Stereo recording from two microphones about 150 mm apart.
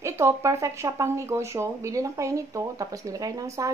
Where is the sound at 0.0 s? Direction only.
20° right (ahead or behind).